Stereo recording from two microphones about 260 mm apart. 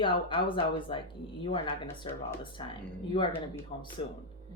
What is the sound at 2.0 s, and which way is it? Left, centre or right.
A woman's voice, centre.